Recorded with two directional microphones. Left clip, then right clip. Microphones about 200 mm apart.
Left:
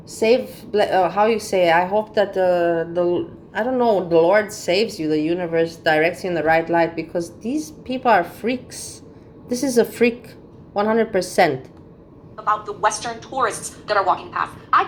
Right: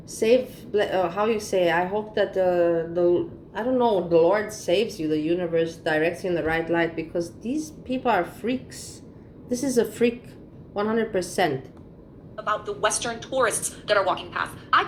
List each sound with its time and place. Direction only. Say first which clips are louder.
0.2 s a man's voice: left 3 dB; 30° left (ahead or behind)
12.6 s a woman's voice: left 4 dB; 55° right (ahead or behind)